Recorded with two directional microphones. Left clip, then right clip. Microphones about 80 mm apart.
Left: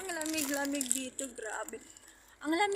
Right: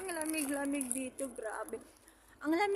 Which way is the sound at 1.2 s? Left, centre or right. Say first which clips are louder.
Even; centre.